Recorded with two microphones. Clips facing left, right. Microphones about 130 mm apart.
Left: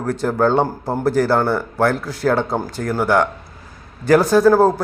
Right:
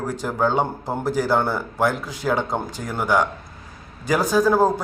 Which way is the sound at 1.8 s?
15° right (ahead or behind).